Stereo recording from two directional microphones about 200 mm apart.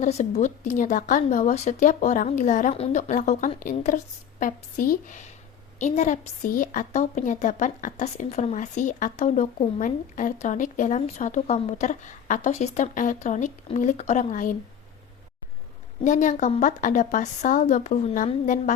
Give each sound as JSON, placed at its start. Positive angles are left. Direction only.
{"t": 0.0, "sound": "a woman's voice", "side_deg": 35}
{"t": 16.0, "sound": "a woman's voice", "side_deg": 40}